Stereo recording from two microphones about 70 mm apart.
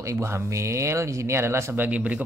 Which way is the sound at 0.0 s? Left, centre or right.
Right.